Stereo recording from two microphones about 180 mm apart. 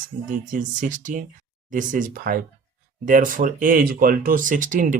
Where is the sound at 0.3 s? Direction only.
45° right (ahead or behind).